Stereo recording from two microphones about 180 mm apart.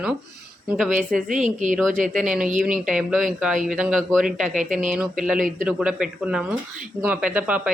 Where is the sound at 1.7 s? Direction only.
Centre (ahead or behind).